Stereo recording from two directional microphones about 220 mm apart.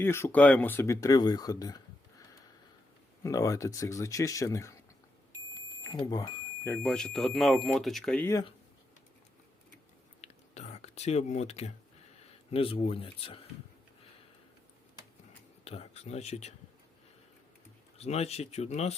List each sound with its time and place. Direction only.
0.0 s speech: 10° left (ahead or behind)
3.2 s speech: 15° left (ahead or behind)
5.5 s smoke detector: 15° left (ahead or behind)
6.8 s speech: 5° left (ahead or behind)
10.2 s a sound: 30° left (ahead or behind)
12.5 s speech: 25° left (ahead or behind)
15.6 s speech: 30° left (ahead or behind)
17.9 s speech: 30° left (ahead or behind)